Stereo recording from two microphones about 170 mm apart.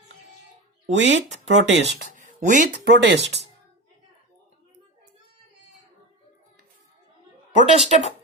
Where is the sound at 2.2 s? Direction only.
45° right (ahead or behind).